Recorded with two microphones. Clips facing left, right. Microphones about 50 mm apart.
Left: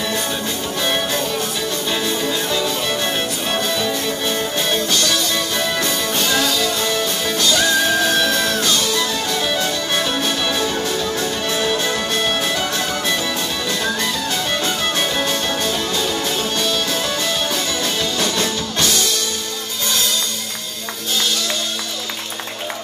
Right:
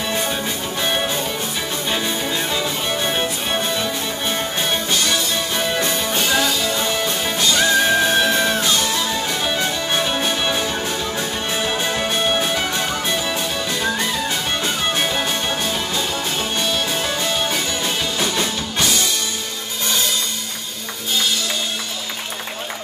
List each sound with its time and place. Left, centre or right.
0.8 s music: centre
1.9 s music: centre
14.6 s music: centre